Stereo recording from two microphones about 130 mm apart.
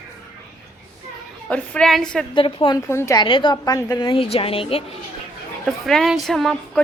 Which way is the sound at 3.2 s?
40° left (ahead or behind).